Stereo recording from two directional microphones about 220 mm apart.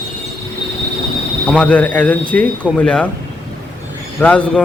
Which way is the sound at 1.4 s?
5° left (ahead or behind).